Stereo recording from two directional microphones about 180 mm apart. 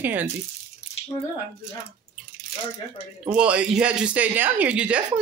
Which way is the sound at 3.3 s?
5° right (ahead or behind).